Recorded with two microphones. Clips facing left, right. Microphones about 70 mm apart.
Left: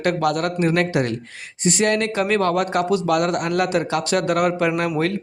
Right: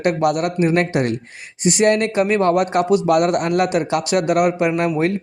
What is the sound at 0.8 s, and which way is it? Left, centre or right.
Speech, right.